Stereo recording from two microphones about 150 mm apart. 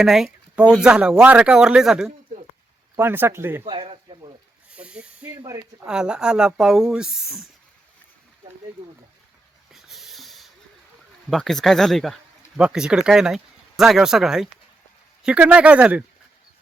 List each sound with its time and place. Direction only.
0.0 s speech: 5° right (ahead or behind)
2.9 s speech: 15° right (ahead or behind)
3.6 s speech: 40° right (ahead or behind)
4.7 s snake: 5° right (ahead or behind)
5.3 s speech: 35° right (ahead or behind)
5.8 s speech: 5° right (ahead or behind)
9.7 s snort: centre (ahead or behind)
11.3 s speech: centre (ahead or behind)